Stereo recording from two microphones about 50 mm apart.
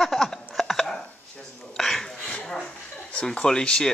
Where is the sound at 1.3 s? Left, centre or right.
Centre.